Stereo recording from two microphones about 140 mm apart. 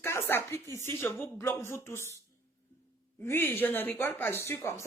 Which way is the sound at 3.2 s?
15° left (ahead or behind).